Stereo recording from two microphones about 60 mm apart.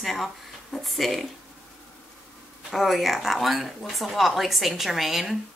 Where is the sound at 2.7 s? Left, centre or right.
Centre.